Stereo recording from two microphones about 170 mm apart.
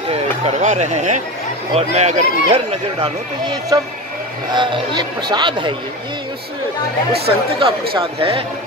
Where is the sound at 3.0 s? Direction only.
25° right (ahead or behind).